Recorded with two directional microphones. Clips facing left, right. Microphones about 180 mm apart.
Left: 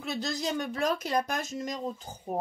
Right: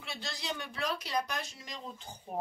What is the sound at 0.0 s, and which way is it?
Speech, 40° left (ahead or behind).